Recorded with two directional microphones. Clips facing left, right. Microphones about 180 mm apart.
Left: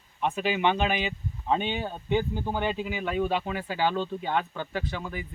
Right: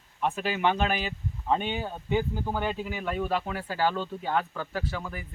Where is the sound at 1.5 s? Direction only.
5° right (ahead or behind).